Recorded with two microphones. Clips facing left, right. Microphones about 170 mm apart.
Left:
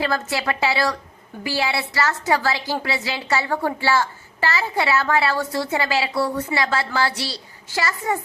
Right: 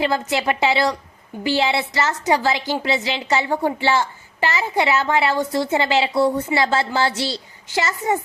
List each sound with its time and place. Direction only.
0.0 s a child's voice: 20° right (ahead or behind)